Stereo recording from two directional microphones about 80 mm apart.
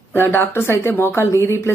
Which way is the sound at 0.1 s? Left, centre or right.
Left.